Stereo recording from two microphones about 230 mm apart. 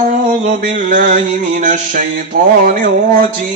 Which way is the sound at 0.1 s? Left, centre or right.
Right.